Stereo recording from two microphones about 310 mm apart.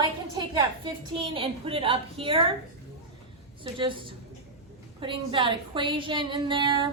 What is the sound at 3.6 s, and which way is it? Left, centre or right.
Speech, centre.